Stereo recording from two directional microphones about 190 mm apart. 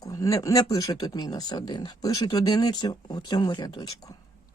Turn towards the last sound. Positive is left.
turn(degrees=20)  # may be behind; listen again after turning